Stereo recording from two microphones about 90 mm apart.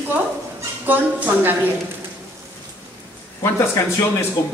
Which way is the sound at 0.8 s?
20° right (ahead or behind).